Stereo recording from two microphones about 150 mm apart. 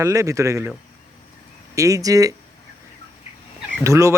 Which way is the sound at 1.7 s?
20° right (ahead or behind).